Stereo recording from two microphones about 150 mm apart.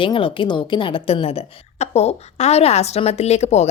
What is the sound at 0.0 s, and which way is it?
A woman's voice, 35° left (ahead or behind).